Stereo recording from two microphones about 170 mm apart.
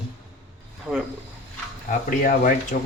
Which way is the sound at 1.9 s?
55° left (ahead or behind).